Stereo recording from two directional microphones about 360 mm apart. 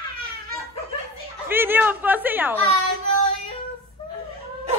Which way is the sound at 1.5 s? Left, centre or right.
Centre.